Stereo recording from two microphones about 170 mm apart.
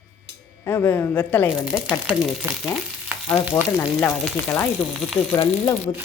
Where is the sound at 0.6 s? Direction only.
10° left (ahead or behind).